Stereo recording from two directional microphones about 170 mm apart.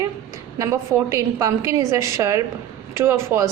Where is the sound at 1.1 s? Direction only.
15° right (ahead or behind).